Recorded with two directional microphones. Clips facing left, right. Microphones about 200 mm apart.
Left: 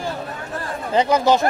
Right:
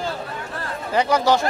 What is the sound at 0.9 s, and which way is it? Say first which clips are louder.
Speech: left 2 dB; 20° left (ahead or behind).